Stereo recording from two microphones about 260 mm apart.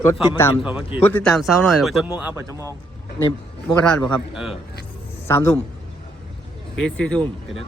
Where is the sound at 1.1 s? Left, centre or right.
Centre.